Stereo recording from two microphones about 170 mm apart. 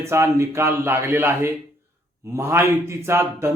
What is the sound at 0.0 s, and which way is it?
A man's voice, 15° right (ahead or behind).